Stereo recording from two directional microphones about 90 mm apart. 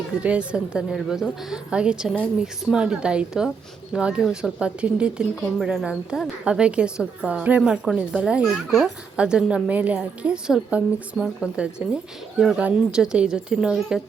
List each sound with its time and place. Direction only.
0.2 s a woman's voice: 15° right (ahead or behind)